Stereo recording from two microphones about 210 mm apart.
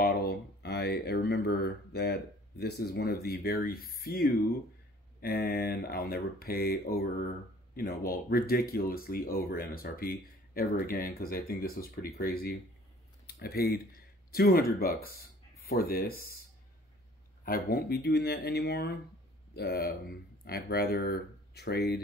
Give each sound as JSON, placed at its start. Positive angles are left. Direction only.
{"t": 0.0, "sound": "a sound", "side_deg": 50}
{"t": 2.6, "sound": "speech", "side_deg": 50}
{"t": 17.5, "sound": "speech", "side_deg": 45}